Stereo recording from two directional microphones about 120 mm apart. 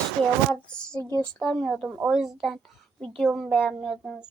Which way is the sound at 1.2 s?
10° left (ahead or behind).